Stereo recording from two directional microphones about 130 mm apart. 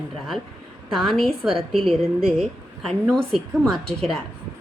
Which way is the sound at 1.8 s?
45° right (ahead or behind).